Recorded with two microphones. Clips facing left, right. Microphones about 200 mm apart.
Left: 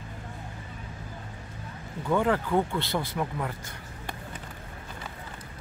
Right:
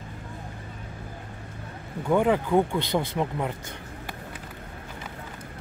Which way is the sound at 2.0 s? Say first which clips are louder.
Right 3 dB; 15° right (ahead or behind).